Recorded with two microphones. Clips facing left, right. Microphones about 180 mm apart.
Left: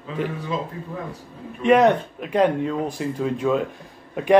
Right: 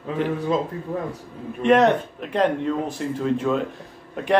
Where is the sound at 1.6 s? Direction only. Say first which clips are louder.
Left 1 dB; 5° left (ahead or behind).